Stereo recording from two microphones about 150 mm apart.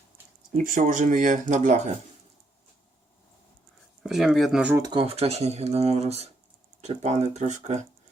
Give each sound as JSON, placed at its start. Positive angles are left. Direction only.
{"t": 0.5, "sound": "speech", "side_deg": -60}
{"t": 4.0, "sound": "speech", "side_deg": -5}
{"t": 4.8, "sound": "speech", "side_deg": -30}
{"t": 5.0, "sound": "speech", "side_deg": -40}